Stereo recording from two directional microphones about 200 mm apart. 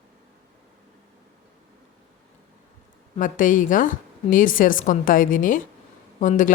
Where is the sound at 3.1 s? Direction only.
40° left (ahead or behind).